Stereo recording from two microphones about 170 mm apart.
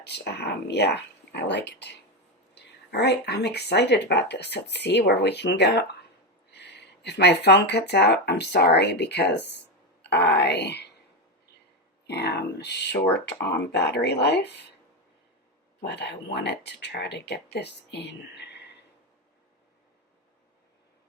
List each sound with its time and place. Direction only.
0.0 s speech: 75° left (ahead or behind)
2.9 s speech: 75° left (ahead or behind)
12.0 s speech: 75° left (ahead or behind)
15.8 s speech: 75° left (ahead or behind)